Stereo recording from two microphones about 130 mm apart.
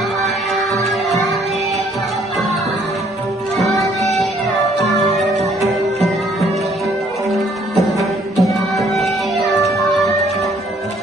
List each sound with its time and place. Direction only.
0.7 s music: centre (ahead or behind)
3.5 s music: centre (ahead or behind)
7.2 s music: centre (ahead or behind)